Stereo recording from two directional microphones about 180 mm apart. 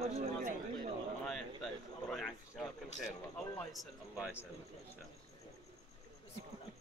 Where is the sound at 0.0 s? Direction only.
35° right (ahead or behind).